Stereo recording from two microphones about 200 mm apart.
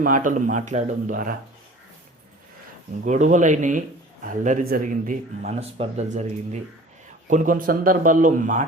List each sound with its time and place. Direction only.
0.0 s a man's voice: 40° right (ahead or behind)
3.0 s a man's voice: 40° right (ahead or behind)